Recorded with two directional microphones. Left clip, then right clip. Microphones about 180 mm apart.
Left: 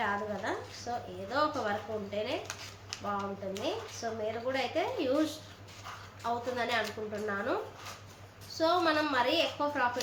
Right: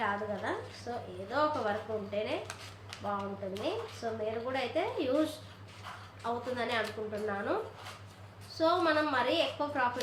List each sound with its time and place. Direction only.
0.0 s a woman's voice: 5° left (ahead or behind)
6.2 s a woman's voice: 5° left (ahead or behind)
8.5 s a woman's voice: 5° left (ahead or behind)